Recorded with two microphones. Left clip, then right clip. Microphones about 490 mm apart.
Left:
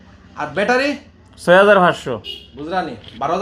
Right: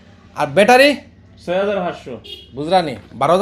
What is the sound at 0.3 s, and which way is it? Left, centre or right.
Speech, right.